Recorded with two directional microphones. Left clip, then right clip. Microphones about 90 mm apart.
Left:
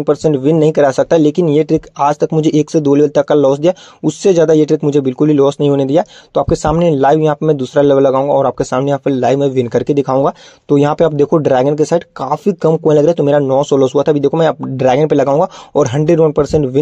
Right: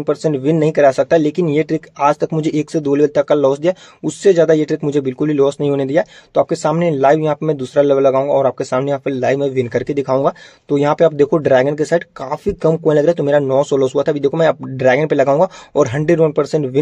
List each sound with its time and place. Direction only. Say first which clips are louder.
0.0 s speech: left 4 dB; 35° left (ahead or behind)